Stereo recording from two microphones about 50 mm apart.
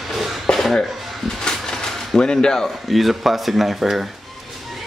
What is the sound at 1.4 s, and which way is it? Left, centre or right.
Train, centre.